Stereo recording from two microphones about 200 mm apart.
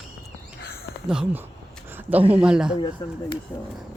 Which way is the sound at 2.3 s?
5° right (ahead or behind).